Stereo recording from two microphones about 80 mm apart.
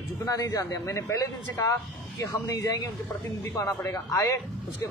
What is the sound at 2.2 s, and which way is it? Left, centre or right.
Speech, left.